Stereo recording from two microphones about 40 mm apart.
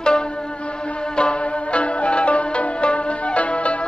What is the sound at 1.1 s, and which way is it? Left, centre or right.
Music, left.